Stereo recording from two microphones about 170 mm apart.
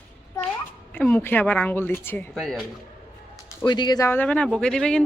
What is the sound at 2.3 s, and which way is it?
Speech, 5° left (ahead or behind).